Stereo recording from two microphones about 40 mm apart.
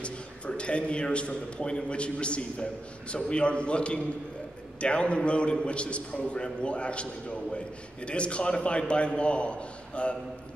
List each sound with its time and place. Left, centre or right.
0.0 s a man's voice: left